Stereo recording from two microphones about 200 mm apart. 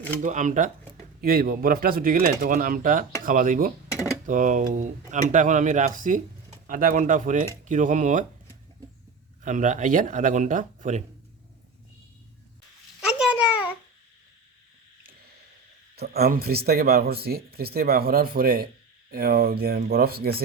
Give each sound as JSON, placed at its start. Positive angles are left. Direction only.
{"t": 0.2, "sound": "speech", "side_deg": -40}
{"t": 9.4, "sound": "speech", "side_deg": -40}
{"t": 13.1, "sound": "a sound", "side_deg": -5}
{"t": 16.0, "sound": "speech", "side_deg": -50}